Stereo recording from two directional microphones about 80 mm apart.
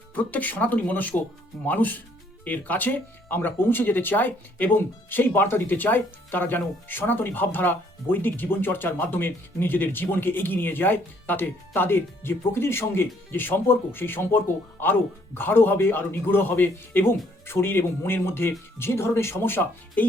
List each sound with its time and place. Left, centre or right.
0.1 s speech: left